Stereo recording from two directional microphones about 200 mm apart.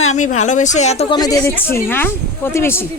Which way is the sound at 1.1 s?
20° left (ahead or behind).